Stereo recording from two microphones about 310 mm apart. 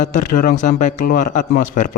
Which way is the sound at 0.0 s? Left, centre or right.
Left.